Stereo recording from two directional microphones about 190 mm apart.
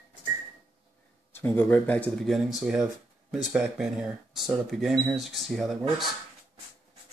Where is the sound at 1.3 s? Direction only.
10° left (ahead or behind).